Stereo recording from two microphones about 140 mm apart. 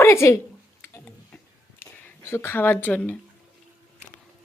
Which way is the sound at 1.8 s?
15° left (ahead or behind).